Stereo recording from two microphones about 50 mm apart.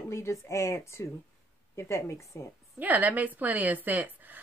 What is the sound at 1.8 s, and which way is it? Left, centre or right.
Speech, left.